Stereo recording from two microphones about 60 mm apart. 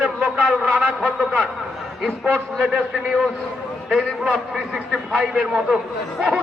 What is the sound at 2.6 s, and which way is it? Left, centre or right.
A man's voice, centre.